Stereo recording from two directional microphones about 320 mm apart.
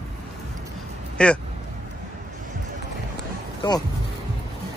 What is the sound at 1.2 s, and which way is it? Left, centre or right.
Speech, centre.